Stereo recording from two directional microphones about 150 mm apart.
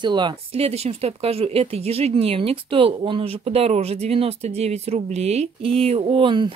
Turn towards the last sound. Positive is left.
turn(degrees=-35)  # may be behind; listen again after turning